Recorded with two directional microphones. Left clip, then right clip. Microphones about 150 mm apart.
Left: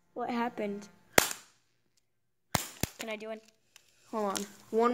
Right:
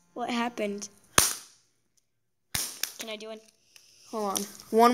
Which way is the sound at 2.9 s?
25° left (ahead or behind).